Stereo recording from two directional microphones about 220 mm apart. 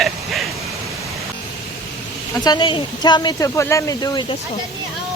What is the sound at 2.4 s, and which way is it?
Speech, 20° left (ahead or behind).